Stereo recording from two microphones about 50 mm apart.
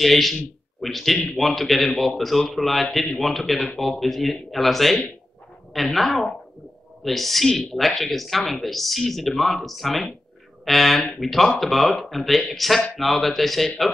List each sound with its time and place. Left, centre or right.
0.0 s a man's voice: centre
3.5 s speech: centre
3.8 s a man's voice: centre